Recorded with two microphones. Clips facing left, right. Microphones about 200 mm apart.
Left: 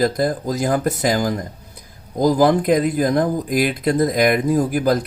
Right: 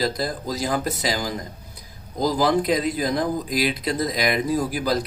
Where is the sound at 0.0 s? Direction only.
50° left (ahead or behind).